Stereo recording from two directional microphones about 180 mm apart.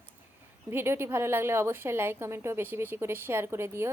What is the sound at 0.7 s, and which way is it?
A woman's voice, 15° right (ahead or behind).